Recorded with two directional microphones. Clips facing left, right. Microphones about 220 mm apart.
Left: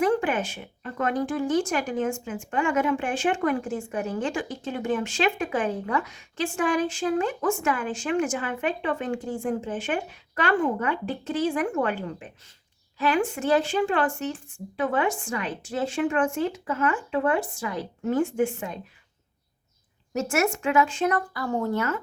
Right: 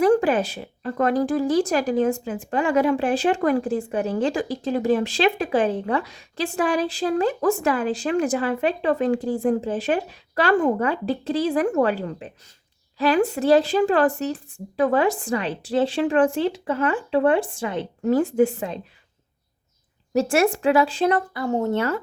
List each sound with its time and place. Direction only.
0.0 s speech: 40° right (ahead or behind)
20.1 s speech: 30° right (ahead or behind)
21.3 s speech: 25° right (ahead or behind)